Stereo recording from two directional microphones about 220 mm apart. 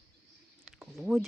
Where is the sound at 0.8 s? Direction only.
Centre (ahead or behind).